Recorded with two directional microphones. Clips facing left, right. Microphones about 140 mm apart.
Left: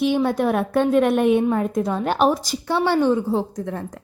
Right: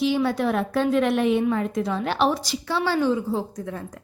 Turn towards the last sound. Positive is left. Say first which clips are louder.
# left 4 dB
turn(degrees=55)  # may be behind; listen again after turning